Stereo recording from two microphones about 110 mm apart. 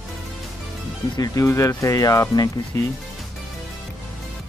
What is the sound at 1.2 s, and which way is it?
Speech, 25° left (ahead or behind).